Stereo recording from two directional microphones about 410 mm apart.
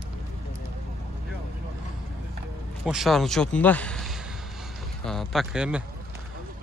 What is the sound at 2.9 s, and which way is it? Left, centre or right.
A man's voice, centre.